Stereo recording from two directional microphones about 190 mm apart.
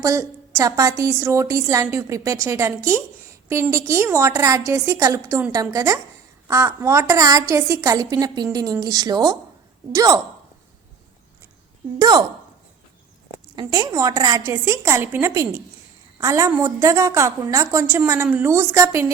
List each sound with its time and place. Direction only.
0.0 s a woman's voice: 15° right (ahead or behind)
11.9 s speech: 20° right (ahead or behind)
13.6 s a woman's voice: 20° right (ahead or behind)